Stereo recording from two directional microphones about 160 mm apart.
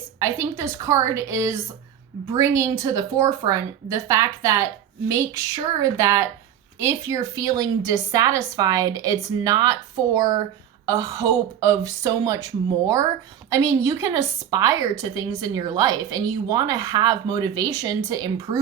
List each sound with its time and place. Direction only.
0.2 s a woman's voice: 15° right (ahead or behind)